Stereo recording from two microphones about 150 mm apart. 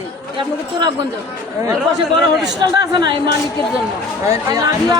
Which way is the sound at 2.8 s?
30° right (ahead or behind).